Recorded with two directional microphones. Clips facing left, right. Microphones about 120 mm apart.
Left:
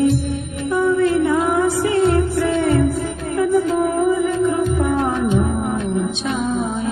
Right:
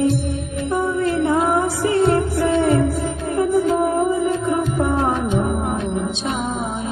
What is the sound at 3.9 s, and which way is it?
Music, 30° right (ahead or behind).